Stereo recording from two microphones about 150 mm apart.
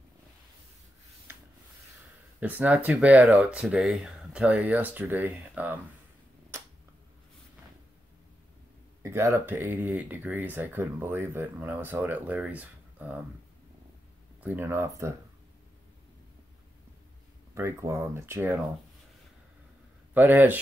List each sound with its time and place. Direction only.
2.4 s speech: 10° right (ahead or behind)
9.0 s speech: 20° right (ahead or behind)
14.4 s speech: 15° right (ahead or behind)
17.6 s speech: 20° right (ahead or behind)
20.2 s speech: 10° right (ahead or behind)